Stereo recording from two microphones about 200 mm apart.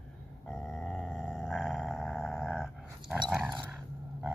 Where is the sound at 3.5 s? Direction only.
15° right (ahead or behind).